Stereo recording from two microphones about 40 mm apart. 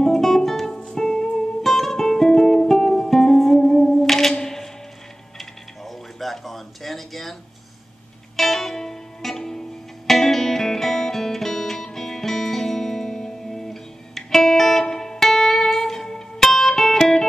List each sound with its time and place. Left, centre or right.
0.0 s music: centre
1.6 s music: centre
5.4 s a sound: centre
8.4 s music: centre